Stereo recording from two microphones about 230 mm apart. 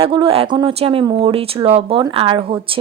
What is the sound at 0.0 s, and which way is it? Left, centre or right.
A woman's voice, right.